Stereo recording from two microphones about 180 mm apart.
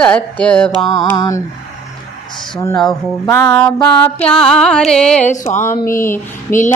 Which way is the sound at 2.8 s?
20° left (ahead or behind).